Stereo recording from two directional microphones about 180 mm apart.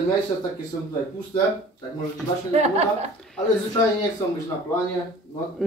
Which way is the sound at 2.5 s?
35° right (ahead or behind).